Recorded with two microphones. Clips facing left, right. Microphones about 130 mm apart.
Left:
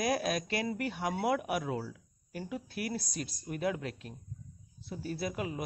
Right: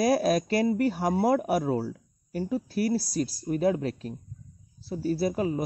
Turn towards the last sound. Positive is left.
turn(degrees=-35)  # may be behind; listen again after turning